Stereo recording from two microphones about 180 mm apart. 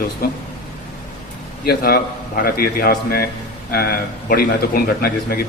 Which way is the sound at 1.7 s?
60° left (ahead or behind).